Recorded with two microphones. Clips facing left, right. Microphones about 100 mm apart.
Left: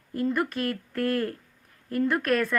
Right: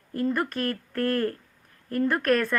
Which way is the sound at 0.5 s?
45° right (ahead or behind).